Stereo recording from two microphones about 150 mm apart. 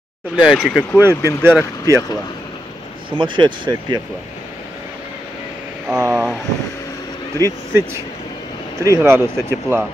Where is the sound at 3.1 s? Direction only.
30° right (ahead or behind).